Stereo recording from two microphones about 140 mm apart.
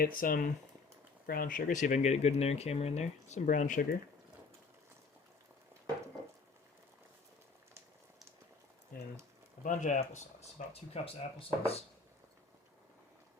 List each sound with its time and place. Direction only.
0.0 s speech: 90° left; by 3.8 s 65° left (ahead or behind)
9.6 s speech: 60° left (ahead or behind); by 11.8 s 45° left (ahead or behind)